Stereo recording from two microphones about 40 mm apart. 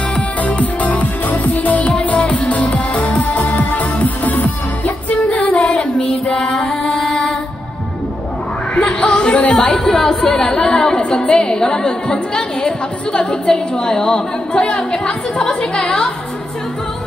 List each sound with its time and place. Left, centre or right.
0.4 s music: left
1.9 s music: left
5.6 s child singing: centre
6.3 s music: centre
8.7 s music: centre
9.4 s chatter: left
9.8 s a woman's voice: centre